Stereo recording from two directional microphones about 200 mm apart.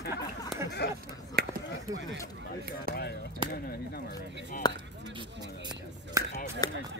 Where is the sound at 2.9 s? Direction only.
45° right (ahead or behind).